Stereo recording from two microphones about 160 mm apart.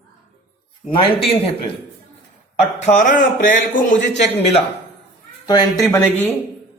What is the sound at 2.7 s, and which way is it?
Speech, 45° left (ahead or behind).